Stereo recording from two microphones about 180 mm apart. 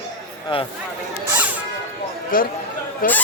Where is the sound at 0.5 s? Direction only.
25° left (ahead or behind).